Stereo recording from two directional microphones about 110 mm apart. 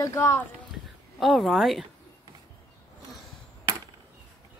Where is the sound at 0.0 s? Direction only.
30° left (ahead or behind).